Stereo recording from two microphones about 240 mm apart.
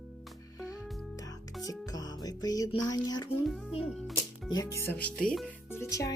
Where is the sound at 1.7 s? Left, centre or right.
Centre.